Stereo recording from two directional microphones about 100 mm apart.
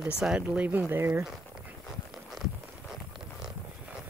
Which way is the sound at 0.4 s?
20° right (ahead or behind).